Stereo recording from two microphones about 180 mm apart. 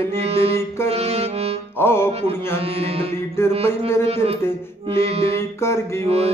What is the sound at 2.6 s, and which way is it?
Music, 30° right (ahead or behind).